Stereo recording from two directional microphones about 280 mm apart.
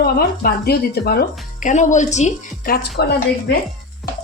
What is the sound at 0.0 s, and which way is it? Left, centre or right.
Speech, left.